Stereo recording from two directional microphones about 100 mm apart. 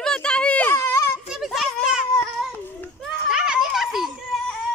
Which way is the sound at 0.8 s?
30° left (ahead or behind).